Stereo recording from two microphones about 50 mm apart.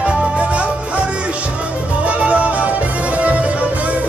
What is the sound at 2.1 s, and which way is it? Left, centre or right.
Music, right.